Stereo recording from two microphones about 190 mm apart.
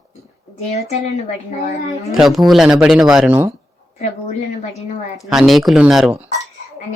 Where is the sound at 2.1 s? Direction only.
Centre (ahead or behind).